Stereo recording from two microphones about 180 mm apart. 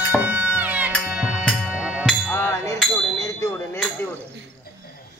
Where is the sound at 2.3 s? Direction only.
15° left (ahead or behind).